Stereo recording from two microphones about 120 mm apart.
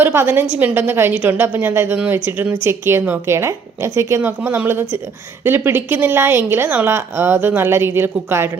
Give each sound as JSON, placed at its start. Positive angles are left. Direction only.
{"t": 0.0, "sound": "a woman's voice", "side_deg": -20}